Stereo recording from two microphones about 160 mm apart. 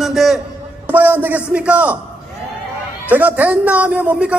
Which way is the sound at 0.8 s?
10° right (ahead or behind).